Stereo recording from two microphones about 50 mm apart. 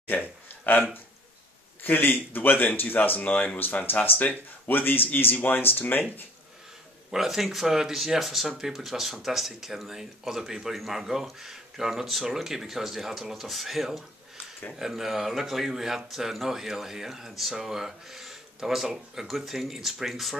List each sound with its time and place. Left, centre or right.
1.8 s speech: left
7.1 s speech: centre